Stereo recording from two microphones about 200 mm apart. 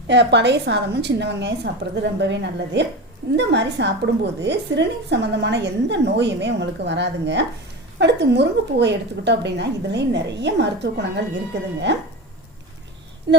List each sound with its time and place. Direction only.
0.1 s a woman's voice: 60° right (ahead or behind)
13.3 s speech: 60° right (ahead or behind)